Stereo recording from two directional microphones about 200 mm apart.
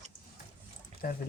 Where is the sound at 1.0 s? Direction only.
45° left (ahead or behind).